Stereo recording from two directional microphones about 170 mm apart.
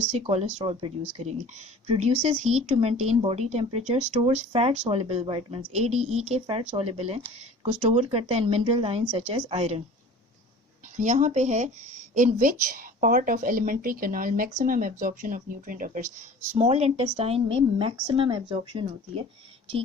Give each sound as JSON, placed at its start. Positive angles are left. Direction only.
{"t": 0.2, "sound": "a woman's voice", "side_deg": -35}
{"t": 10.9, "sound": "a woman's voice", "side_deg": -45}
{"t": 16.6, "sound": "a woman's voice", "side_deg": -35}